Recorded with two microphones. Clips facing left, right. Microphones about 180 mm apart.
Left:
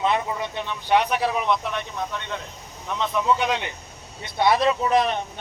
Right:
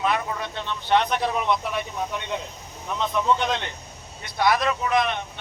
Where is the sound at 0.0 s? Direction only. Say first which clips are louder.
Left 2 dB; 20° left (ahead or behind).